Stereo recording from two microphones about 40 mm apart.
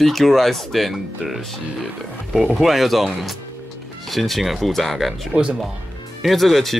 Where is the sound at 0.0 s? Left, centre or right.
Centre.